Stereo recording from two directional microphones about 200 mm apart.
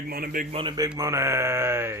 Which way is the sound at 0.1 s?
45° right (ahead or behind).